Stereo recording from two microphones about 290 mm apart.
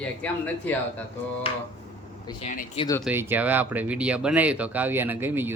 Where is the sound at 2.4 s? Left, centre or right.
Left.